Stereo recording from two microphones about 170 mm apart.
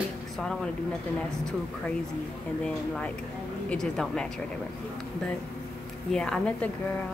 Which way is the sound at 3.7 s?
5° left (ahead or behind).